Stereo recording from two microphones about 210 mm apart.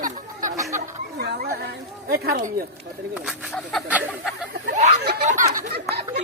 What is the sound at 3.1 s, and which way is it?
Speech, 5° right (ahead or behind).